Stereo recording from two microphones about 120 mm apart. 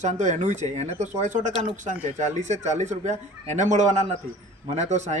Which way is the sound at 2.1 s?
75° right (ahead or behind).